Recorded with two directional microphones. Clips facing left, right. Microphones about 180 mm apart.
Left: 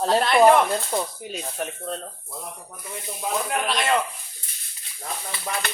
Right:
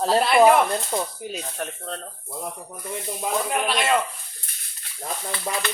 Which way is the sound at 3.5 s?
Centre (ahead or behind).